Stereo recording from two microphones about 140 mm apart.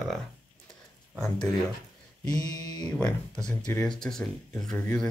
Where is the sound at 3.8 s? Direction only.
5° left (ahead or behind).